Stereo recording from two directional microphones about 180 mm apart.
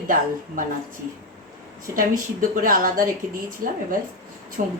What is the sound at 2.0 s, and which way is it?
A woman's voice, 50° right (ahead or behind).